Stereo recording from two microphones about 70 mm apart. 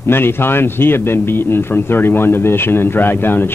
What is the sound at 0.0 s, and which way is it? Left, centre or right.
Speech, left.